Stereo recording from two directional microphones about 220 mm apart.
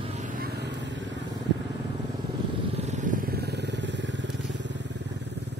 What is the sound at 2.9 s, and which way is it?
Vehicle, 35° right (ahead or behind).